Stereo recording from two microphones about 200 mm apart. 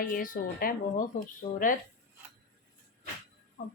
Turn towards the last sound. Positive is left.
turn(degrees=40)  # may be behind; listen again after turning